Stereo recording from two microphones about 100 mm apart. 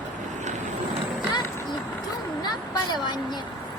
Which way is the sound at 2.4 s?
45° left (ahead or behind).